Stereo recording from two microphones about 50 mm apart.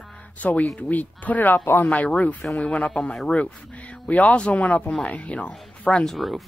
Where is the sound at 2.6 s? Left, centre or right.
Left.